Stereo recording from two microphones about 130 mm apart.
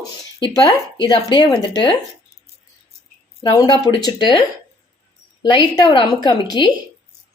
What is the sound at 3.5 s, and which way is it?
Speech, 35° left (ahead or behind).